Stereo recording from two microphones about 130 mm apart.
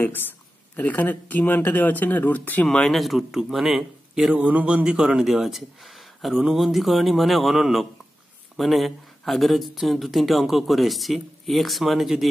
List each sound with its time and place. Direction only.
0.0 s a woman's voice: 15° left (ahead or behind); by 12.3 s centre (ahead or behind)